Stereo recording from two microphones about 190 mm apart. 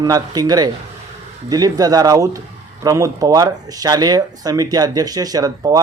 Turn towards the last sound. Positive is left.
turn(degrees=-20)  # may be behind; listen again after turning